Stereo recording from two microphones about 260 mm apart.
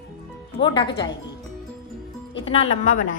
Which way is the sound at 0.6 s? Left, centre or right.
Centre.